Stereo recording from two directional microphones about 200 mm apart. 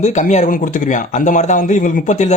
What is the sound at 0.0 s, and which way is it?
A man's voice, 35° left (ahead or behind).